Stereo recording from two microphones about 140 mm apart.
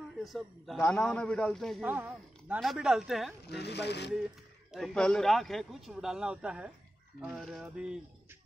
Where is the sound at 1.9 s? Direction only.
10° right (ahead or behind).